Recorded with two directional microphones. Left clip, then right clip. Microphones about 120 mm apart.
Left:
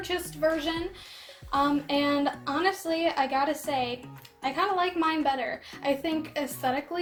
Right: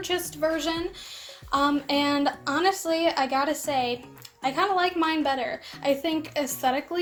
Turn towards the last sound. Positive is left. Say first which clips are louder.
# right 3 dB
turn(degrees=-40)  # may be behind; listen again after turning